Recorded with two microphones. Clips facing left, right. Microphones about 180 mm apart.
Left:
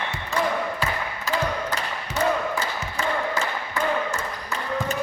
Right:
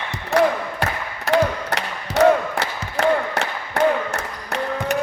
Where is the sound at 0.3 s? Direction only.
65° right (ahead or behind).